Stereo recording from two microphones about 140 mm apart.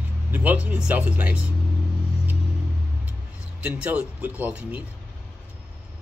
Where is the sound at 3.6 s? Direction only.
10° right (ahead or behind).